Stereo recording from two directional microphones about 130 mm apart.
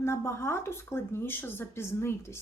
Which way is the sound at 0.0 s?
20° left (ahead or behind).